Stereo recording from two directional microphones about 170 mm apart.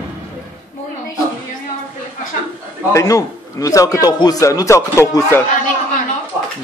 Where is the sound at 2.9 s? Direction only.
20° left (ahead or behind).